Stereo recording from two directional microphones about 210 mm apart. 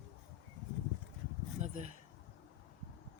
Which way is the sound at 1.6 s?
35° right (ahead or behind).